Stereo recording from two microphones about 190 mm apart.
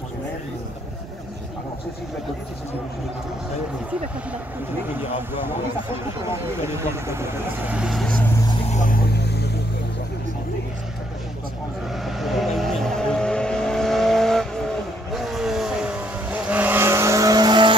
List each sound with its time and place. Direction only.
6.2 s speech: 15° right (ahead or behind)
8.7 s speech: 45° left (ahead or behind)
9.2 s vehicle: 60° left (ahead or behind)
12.0 s vehicle: centre (ahead or behind); by 17.7 s 25° right (ahead or behind)